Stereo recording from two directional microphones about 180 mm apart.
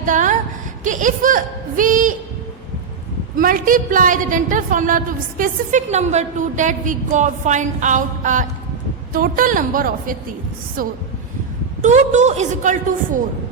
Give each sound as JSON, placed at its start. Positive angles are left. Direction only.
{"t": 0.0, "sound": "a woman's voice", "side_deg": -45}
{"t": 3.3, "sound": "a woman's voice", "side_deg": -50}
{"t": 11.8, "sound": "a woman's voice", "side_deg": -40}